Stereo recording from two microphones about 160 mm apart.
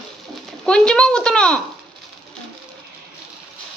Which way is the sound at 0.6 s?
5° left (ahead or behind).